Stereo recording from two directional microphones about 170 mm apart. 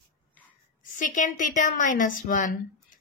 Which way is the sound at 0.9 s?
50° left (ahead or behind).